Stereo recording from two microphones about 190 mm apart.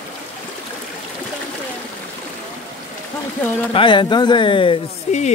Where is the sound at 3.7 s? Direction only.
25° left (ahead or behind).